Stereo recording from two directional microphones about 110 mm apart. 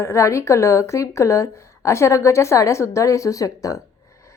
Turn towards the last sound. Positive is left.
turn(degrees=30)  # may be behind; listen again after turning